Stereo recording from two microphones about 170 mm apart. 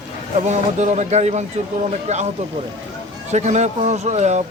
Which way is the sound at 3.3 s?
40° right (ahead or behind).